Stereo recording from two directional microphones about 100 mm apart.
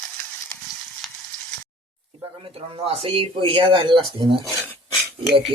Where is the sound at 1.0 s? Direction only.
Centre (ahead or behind).